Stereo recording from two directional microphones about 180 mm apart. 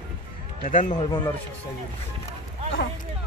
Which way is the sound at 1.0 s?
30° left (ahead or behind).